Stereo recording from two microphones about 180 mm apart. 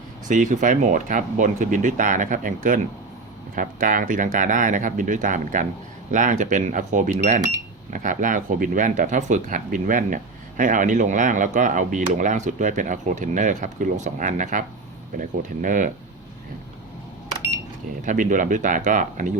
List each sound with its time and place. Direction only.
0.3 s speech: 45° right (ahead or behind)
18.0 s speech: 45° right (ahead or behind)